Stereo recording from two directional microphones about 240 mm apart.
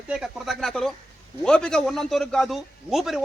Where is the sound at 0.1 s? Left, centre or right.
Centre.